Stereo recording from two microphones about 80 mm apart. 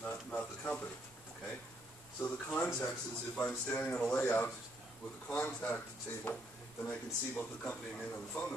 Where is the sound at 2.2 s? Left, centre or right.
Centre.